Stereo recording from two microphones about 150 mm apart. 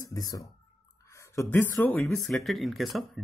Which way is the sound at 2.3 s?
Centre (ahead or behind).